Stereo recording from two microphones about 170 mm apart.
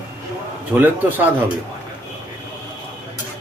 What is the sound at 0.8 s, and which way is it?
Speech, 10° right (ahead or behind).